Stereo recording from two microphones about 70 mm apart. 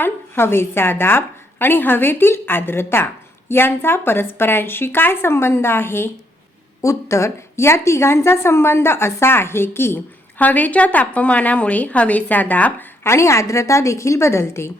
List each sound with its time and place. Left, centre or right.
0.0 s a woman's voice: left
13.1 s a woman's voice: left